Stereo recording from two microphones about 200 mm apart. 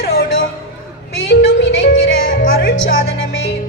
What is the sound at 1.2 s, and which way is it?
Music, 70° left (ahead or behind).